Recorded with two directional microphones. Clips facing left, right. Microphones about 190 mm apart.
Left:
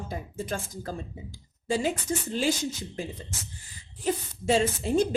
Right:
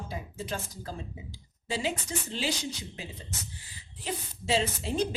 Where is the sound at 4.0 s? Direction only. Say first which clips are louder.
Left 8 dB; 45° left (ahead or behind).